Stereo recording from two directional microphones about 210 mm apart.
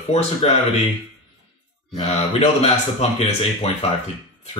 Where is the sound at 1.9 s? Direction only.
30° left (ahead or behind).